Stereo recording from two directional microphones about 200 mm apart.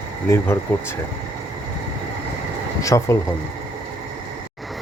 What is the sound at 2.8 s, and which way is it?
Speech, 15° left (ahead or behind).